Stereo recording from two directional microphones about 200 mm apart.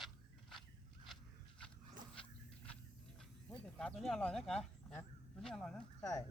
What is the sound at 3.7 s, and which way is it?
Speech, centre (ahead or behind).